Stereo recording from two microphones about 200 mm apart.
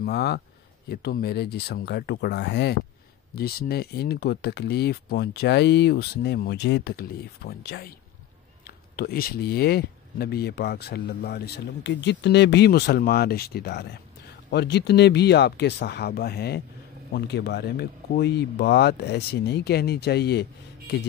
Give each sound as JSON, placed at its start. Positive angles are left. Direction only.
{"t": 0.0, "sound": "speech", "side_deg": 55}
{"t": 8.9, "sound": "speech", "side_deg": 50}